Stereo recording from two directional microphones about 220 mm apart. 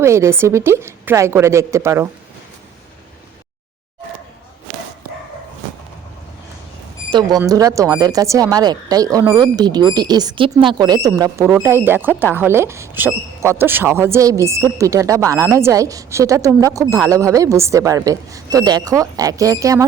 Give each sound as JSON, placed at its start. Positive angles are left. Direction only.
{"t": 0.0, "sound": "speech", "side_deg": -10}
{"t": 7.1, "sound": "speech", "side_deg": -20}